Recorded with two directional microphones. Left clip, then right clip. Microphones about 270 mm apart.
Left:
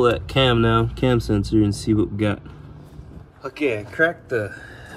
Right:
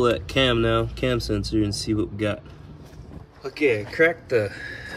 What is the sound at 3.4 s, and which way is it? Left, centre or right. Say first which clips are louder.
Speech: right 1 dB; centre.